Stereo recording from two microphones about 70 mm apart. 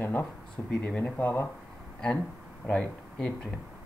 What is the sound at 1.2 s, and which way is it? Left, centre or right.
Speech, left.